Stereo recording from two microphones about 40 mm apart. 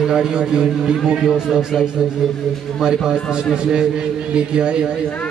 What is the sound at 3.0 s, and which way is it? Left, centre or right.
A man's voice, centre.